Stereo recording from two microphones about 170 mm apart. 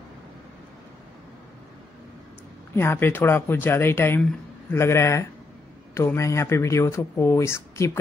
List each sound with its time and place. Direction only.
2.7 s speech: 15° left (ahead or behind)